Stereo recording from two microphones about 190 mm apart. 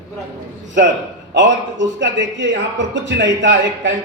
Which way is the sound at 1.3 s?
70° right (ahead or behind).